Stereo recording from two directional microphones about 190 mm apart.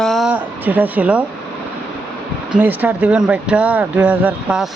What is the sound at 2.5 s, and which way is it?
Speech, 10° right (ahead or behind).